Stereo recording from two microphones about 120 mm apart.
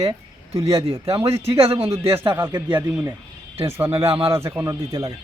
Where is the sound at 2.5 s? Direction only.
35° right (ahead or behind).